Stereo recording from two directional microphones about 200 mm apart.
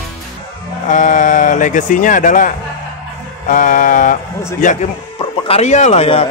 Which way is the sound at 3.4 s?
40° left (ahead or behind).